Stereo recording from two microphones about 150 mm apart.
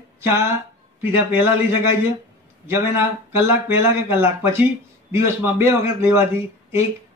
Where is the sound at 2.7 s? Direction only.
15° right (ahead or behind).